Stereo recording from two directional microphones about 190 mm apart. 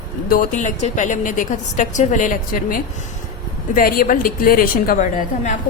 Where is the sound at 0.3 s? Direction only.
45° left (ahead or behind).